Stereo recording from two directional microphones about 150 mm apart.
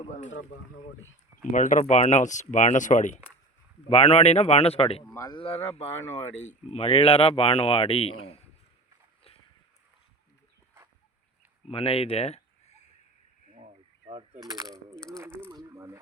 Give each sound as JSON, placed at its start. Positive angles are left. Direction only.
{"t": 0.1, "sound": "speech", "side_deg": 55}
{"t": 1.5, "sound": "speech", "side_deg": 55}
{"t": 3.8, "sound": "speech", "side_deg": 40}
{"t": 5.1, "sound": "speech", "side_deg": 25}
{"t": 5.4, "sound": "speech", "side_deg": 40}
{"t": 11.7, "sound": "speech", "side_deg": 40}
{"t": 15.4, "sound": "a sound", "side_deg": -20}